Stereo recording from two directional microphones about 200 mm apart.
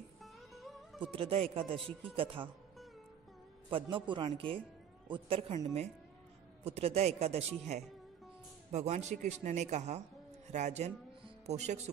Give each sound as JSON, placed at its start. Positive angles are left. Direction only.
{"t": 0.2, "sound": "music", "side_deg": 0}
{"t": 1.1, "sound": "a man's voice", "side_deg": -30}
{"t": 3.7, "sound": "a man's voice", "side_deg": -25}